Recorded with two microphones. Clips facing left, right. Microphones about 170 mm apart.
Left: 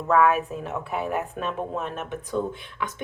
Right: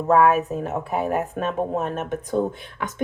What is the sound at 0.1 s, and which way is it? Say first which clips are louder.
Speech: right 3 dB; 40° right (ahead or behind).